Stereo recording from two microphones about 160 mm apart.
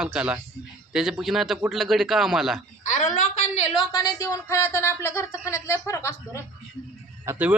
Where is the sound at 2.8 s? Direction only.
50° left (ahead or behind).